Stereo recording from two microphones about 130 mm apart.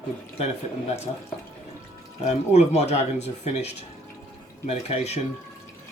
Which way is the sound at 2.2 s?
60° left (ahead or behind).